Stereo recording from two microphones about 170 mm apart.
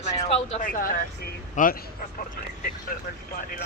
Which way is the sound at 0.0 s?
35° left (ahead or behind).